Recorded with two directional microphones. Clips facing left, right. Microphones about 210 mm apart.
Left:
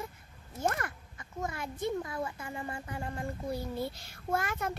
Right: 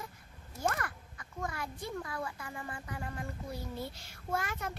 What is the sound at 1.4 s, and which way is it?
Speech, 25° left (ahead or behind).